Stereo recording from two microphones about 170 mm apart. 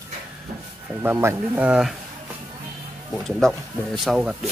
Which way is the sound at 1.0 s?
15° right (ahead or behind).